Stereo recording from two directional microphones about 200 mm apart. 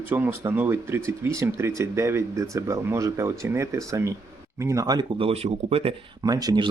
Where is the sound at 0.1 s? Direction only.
10° right (ahead or behind).